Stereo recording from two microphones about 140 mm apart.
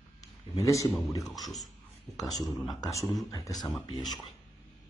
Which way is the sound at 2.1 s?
25° left (ahead or behind).